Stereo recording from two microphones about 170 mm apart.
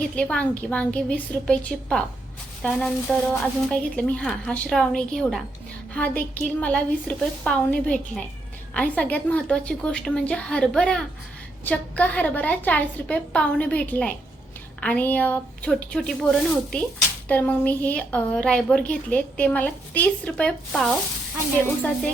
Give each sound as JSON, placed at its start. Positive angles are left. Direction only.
{"t": 0.2, "sound": "a woman's voice", "side_deg": 5}